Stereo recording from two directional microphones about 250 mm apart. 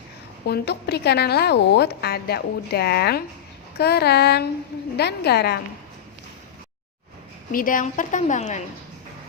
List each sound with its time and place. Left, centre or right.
0.4 s a woman's voice: left
7.5 s a woman's voice: left